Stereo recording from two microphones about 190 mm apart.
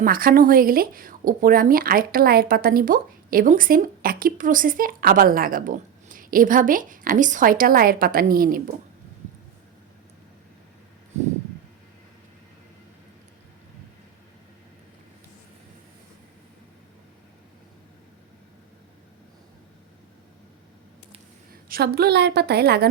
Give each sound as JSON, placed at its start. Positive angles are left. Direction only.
{"t": 0.0, "sound": "speech", "side_deg": -50}
{"t": 21.5, "sound": "a woman's voice", "side_deg": -55}